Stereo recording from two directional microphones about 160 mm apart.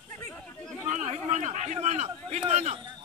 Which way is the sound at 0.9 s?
50° right (ahead or behind).